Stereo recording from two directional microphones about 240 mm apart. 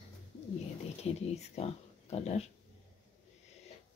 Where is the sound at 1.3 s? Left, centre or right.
Left.